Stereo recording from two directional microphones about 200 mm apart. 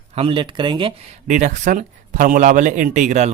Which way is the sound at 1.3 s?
40° right (ahead or behind).